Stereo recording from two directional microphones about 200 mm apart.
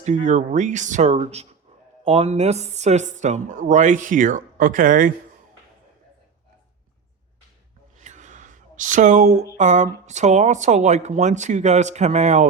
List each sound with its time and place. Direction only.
0.0 s speech: 35° right (ahead or behind)
7.9 s a sound: 35° right (ahead or behind)
9.6 s speech: 35° right (ahead or behind)